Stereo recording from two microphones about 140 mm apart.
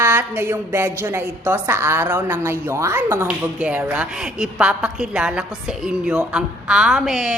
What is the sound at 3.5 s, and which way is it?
A woman's voice, 10° right (ahead or behind).